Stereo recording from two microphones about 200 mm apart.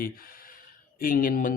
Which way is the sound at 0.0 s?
45° left (ahead or behind).